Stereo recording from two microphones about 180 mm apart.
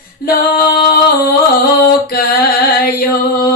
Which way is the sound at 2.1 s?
60° left (ahead or behind).